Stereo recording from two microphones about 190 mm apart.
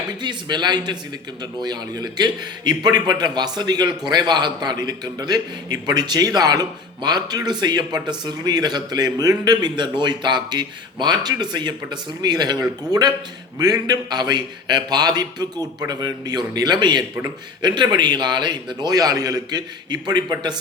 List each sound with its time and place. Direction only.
0.2 s a man's voice: 25° right (ahead or behind)